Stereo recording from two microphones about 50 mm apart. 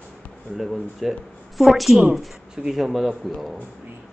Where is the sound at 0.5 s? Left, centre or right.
Centre.